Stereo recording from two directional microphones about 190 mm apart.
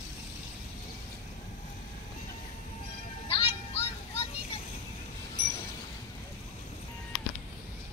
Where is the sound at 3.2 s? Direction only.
30° left (ahead or behind).